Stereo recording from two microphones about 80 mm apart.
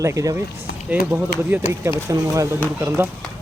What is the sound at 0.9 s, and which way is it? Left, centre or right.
Speech, right.